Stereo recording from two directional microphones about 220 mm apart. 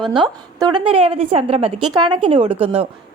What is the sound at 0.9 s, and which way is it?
A woman's voice, 25° right (ahead or behind).